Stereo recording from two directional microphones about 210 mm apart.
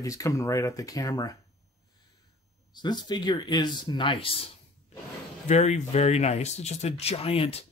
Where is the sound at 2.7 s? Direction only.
20° left (ahead or behind).